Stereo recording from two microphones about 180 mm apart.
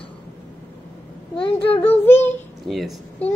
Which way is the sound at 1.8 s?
10° left (ahead or behind).